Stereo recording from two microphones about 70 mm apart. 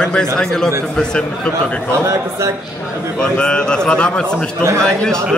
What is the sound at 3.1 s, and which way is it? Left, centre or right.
Speech, centre.